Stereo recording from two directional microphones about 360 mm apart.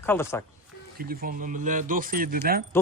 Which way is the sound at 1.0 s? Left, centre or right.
Right.